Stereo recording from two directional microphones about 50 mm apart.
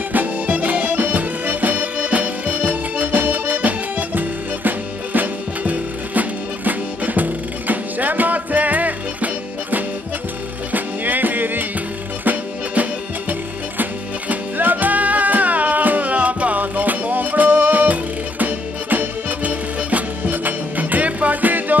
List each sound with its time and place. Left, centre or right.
0.1 s music: right
14.3 s music: right